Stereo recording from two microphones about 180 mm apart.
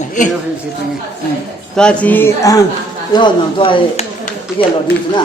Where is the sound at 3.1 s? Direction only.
25° left (ahead or behind).